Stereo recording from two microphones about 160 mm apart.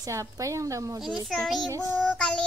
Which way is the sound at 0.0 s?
20° right (ahead or behind).